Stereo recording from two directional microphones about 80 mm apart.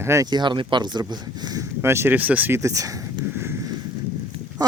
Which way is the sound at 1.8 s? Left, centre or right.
Right.